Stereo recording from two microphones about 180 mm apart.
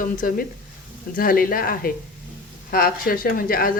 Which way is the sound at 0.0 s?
50° left (ahead or behind).